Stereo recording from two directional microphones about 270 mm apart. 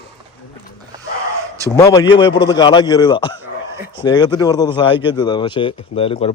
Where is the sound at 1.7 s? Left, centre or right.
Centre.